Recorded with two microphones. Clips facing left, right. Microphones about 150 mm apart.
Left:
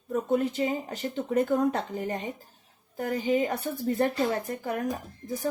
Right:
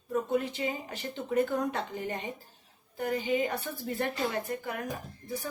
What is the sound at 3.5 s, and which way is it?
A woman's voice, 40° left (ahead or behind).